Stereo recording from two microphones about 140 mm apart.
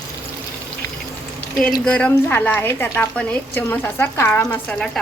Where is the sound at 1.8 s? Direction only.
5° left (ahead or behind).